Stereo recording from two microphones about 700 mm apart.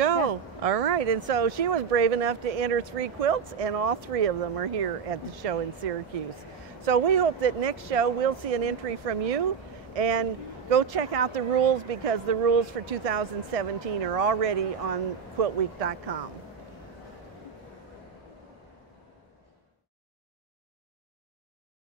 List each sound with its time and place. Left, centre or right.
0.0 s speech: right